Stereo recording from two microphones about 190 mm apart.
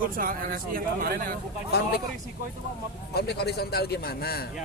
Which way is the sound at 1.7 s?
60° left (ahead or behind).